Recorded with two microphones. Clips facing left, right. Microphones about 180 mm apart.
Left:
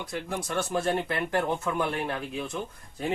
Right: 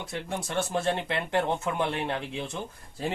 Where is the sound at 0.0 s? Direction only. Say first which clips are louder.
Left 1 dB; 25° right (ahead or behind).